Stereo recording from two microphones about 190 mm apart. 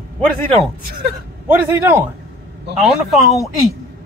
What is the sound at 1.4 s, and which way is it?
Speech, 10° right (ahead or behind).